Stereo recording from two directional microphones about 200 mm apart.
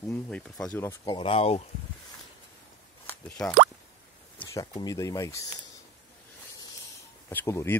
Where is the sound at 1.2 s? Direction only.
30° left (ahead or behind).